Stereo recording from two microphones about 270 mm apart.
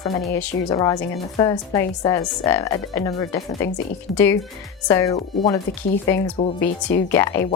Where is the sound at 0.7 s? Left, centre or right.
Centre.